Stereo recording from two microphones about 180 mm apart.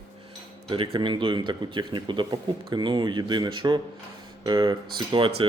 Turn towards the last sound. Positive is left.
turn(degrees=-30)  # may be behind; listen again after turning